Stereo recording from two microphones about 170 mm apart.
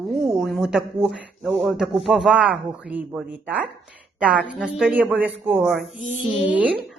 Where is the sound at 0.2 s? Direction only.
Centre (ahead or behind).